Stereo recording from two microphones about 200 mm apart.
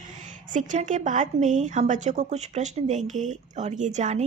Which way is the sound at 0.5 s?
40° right (ahead or behind).